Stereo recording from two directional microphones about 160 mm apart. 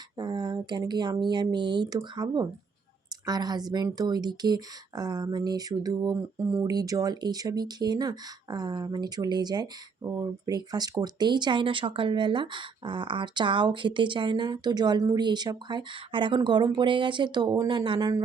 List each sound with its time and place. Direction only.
0.2 s speech: 25° right (ahead or behind)